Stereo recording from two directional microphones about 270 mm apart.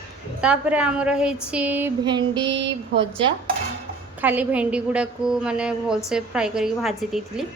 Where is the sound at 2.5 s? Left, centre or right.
Right.